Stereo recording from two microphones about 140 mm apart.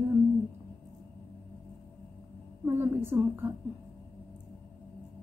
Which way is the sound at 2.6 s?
15° right (ahead or behind).